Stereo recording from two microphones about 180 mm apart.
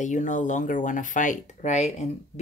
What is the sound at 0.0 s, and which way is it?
Speech, 45° left (ahead or behind).